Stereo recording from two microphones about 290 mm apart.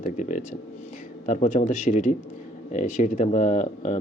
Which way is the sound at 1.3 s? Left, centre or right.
Left.